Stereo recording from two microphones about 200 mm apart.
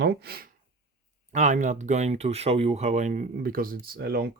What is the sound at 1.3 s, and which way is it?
Speech, 40° right (ahead or behind).